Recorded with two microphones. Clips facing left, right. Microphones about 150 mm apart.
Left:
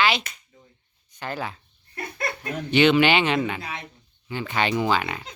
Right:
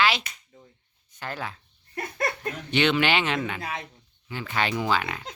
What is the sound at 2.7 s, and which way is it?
Speech, 5° left (ahead or behind).